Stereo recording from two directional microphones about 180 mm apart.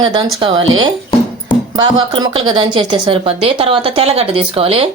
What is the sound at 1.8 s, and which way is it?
Speech, 30° right (ahead or behind).